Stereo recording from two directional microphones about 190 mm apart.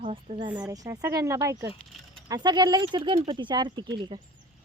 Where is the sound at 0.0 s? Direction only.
30° right (ahead or behind).